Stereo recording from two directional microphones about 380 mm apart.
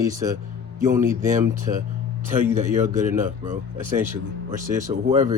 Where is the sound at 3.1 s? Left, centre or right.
Centre.